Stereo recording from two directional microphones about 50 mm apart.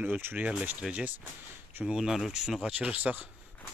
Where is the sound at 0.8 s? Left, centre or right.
Centre.